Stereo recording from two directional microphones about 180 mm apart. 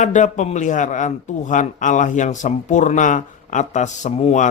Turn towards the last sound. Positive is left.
turn(degrees=40)  # may be behind; listen again after turning